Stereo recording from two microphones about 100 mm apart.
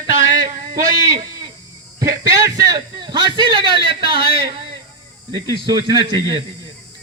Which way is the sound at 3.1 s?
50° right (ahead or behind).